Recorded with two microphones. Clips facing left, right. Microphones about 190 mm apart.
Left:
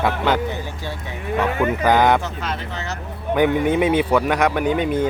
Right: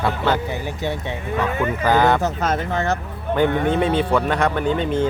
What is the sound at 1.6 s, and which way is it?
Speech, 15° left (ahead or behind).